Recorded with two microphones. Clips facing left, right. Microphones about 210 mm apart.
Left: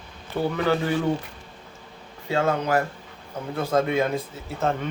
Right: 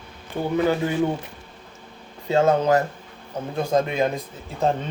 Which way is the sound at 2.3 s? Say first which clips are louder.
Right 5 dB; 25° right (ahead or behind).